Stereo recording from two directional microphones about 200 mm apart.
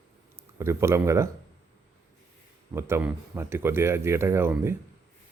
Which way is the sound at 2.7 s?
10° right (ahead or behind).